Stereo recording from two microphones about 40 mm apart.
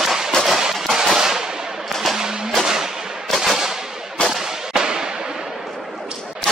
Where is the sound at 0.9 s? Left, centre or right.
Centre.